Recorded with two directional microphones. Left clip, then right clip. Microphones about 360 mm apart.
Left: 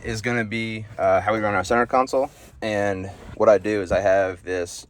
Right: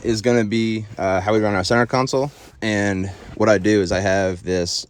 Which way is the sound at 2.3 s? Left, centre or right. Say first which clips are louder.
Right 4 dB; centre.